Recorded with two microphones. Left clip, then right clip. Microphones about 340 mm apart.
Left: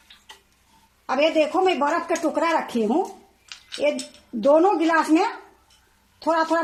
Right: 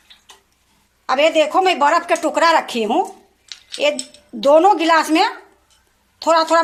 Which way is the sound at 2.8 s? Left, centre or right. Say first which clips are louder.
Right 5 dB; right.